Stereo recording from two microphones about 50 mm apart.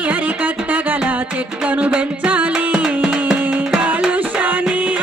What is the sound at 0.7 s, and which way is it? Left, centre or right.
Music, right.